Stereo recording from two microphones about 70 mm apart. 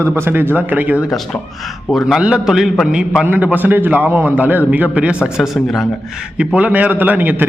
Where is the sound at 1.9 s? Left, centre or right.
Centre.